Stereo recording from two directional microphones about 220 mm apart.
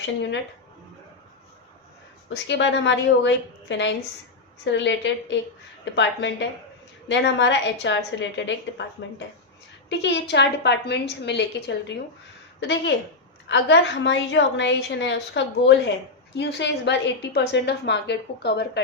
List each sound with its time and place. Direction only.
2.3 s a woman's voice: 55° left (ahead or behind)